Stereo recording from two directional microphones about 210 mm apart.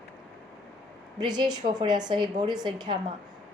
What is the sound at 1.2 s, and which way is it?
A woman's voice, 20° right (ahead or behind).